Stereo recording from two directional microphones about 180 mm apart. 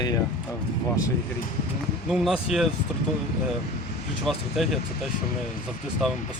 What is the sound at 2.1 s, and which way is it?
Speech, centre (ahead or behind).